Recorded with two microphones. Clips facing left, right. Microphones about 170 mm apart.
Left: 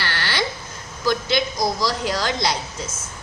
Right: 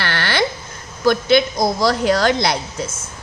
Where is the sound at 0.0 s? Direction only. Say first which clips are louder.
Right 5 dB; 60° right (ahead or behind).